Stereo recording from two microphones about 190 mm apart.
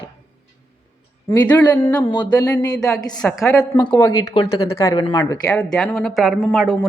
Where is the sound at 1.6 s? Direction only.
15° left (ahead or behind).